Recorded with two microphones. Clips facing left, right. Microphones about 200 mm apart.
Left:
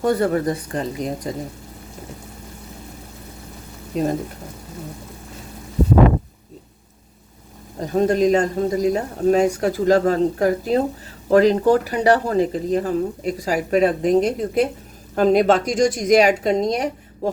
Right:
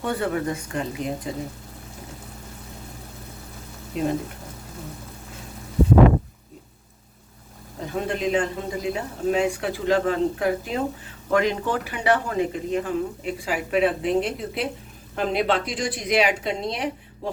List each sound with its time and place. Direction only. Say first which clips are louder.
0.0 s speech: left 6 dB; 40° left (ahead or behind)
3.9 s a woman's voice: left 4 dB; 40° left (ahead or behind)
7.8 s a woman's voice: left 9 dB; 40° left (ahead or behind)